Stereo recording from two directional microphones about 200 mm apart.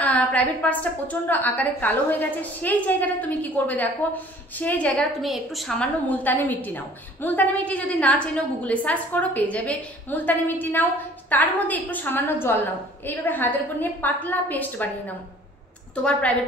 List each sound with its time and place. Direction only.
0.0 s a woman's voice: 5° left (ahead or behind)